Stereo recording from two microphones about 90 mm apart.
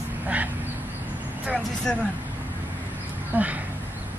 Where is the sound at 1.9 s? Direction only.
5° left (ahead or behind).